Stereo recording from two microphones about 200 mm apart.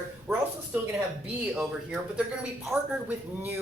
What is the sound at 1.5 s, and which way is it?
A woman's voice, 5° right (ahead or behind).